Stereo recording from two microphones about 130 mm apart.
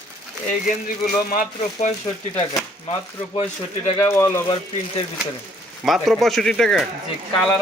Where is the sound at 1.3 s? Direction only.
90° left.